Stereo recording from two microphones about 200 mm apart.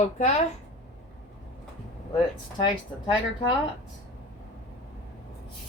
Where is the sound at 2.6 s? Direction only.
25° left (ahead or behind).